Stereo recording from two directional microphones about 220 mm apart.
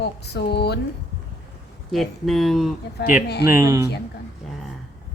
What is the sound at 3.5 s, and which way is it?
Speech, 10° right (ahead or behind).